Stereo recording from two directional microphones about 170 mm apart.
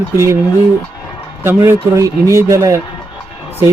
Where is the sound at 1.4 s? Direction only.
15° right (ahead or behind).